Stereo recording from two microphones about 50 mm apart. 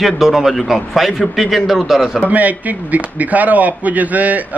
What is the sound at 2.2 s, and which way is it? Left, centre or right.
Speech, right.